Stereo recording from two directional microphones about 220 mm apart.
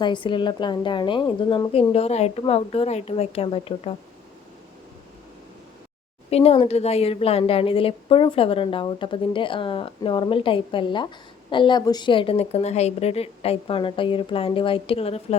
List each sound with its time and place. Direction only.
0.0 s a woman's voice: 20° left (ahead or behind)
6.3 s a woman's voice: 30° left (ahead or behind)